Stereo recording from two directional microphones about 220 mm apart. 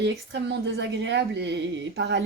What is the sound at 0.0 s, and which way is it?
Speech, 55° right (ahead or behind).